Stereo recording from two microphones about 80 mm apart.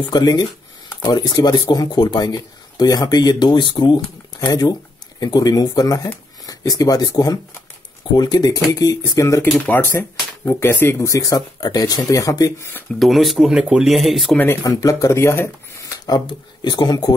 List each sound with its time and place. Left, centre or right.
0.1 s speech: left
4.5 s speech: left
9.4 s speech: left
11.1 s speech: left
13.0 s speech: centre
14.7 s speech: left
16.3 s speech: left